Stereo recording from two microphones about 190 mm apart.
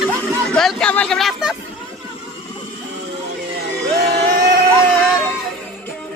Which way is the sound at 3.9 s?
55° right (ahead or behind).